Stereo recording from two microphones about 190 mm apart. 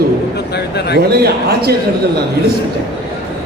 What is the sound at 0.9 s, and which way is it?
Speech, 55° right (ahead or behind).